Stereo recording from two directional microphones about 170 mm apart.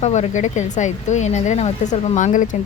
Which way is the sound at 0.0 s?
40° left (ahead or behind).